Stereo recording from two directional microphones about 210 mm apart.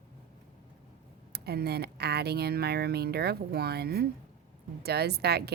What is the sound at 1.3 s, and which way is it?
A woman's voice, 50° right (ahead or behind).